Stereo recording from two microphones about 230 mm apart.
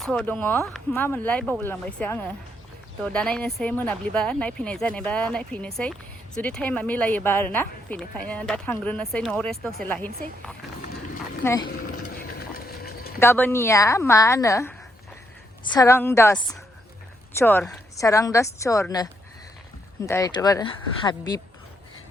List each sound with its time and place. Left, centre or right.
0.0 s speech: centre
11.4 s speech: centre
11.9 s clip-clop: left
13.1 s speech: centre